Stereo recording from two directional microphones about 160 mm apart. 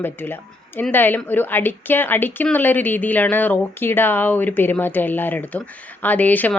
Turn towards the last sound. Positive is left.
turn(degrees=10)  # may be behind; listen again after turning